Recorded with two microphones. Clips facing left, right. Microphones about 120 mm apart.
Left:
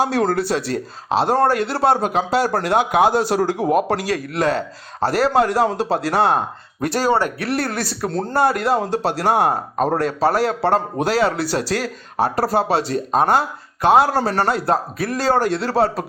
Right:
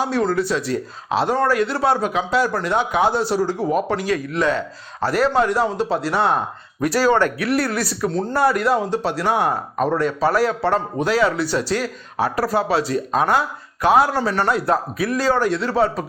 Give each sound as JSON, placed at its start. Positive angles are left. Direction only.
{"t": 0.3, "sound": "speech", "side_deg": 70}
{"t": 0.7, "sound": "speech", "side_deg": 30}
{"t": 2.6, "sound": "speech", "side_deg": 85}
{"t": 3.0, "sound": "speech", "side_deg": 45}
{"t": 7.1, "sound": "speech", "side_deg": 15}
{"t": 7.3, "sound": "speech", "side_deg": 30}